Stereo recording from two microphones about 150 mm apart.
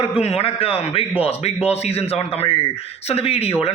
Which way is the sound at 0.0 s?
40° left (ahead or behind).